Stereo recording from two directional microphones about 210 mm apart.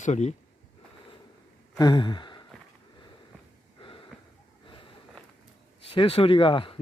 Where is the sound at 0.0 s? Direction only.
35° left (ahead or behind).